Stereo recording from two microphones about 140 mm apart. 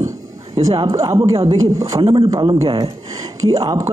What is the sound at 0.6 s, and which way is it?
Speech, 25° right (ahead or behind).